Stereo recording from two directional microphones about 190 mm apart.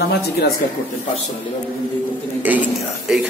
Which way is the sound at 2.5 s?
10° right (ahead or behind).